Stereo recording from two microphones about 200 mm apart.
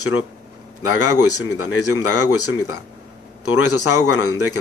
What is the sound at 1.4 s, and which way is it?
Speech, 90° left.